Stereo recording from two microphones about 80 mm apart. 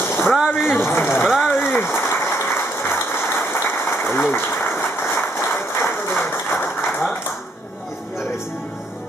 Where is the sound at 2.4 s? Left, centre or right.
Left.